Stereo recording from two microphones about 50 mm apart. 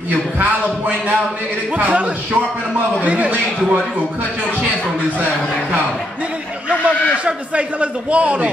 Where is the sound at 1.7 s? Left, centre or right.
Right.